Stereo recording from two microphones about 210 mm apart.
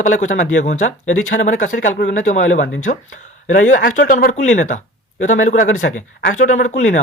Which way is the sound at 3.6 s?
40° left (ahead or behind).